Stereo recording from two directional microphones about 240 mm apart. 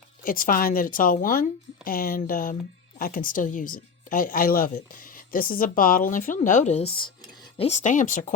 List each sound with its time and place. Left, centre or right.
0.3 s speech: left